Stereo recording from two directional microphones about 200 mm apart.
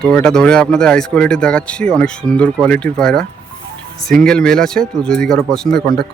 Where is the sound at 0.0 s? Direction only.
5° left (ahead or behind).